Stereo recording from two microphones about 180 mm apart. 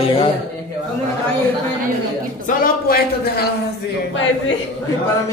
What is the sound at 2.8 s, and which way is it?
Speech, 60° left (ahead or behind).